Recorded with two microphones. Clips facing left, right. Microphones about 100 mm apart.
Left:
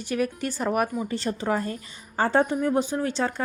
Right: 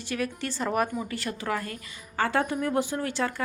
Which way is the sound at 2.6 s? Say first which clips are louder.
Left 3 dB; 15° left (ahead or behind).